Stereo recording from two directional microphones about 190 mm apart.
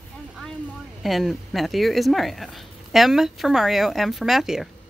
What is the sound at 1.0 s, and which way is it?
Speech, centre (ahead or behind).